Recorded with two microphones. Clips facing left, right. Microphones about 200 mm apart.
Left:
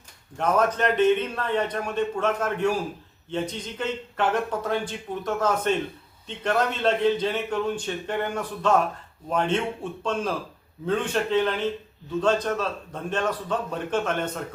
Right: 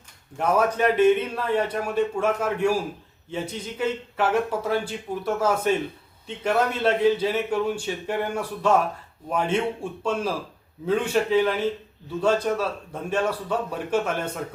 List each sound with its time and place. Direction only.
0.3 s a man's voice: 10° right (ahead or behind)